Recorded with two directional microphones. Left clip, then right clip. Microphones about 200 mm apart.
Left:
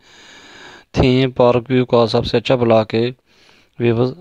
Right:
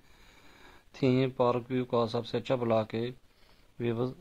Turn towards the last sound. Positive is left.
turn(degrees=45)  # may be behind; listen again after turning